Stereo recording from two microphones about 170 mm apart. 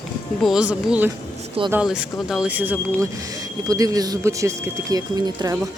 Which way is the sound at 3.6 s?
20° right (ahead or behind).